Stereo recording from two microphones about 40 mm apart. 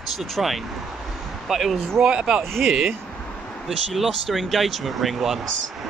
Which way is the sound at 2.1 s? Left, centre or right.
Right.